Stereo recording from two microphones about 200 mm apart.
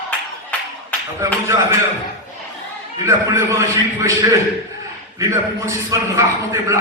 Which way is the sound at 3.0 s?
15° right (ahead or behind).